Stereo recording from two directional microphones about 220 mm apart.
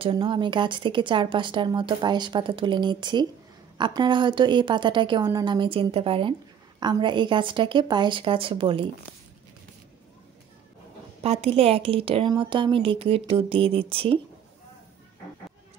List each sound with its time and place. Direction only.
0.0 s a woman's voice: 20° right (ahead or behind)
11.2 s a woman's voice: 25° right (ahead or behind)